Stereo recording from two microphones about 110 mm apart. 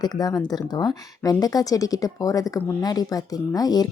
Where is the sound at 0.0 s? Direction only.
35° left (ahead or behind).